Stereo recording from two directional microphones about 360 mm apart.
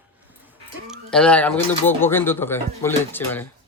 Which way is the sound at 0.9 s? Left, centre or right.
Centre.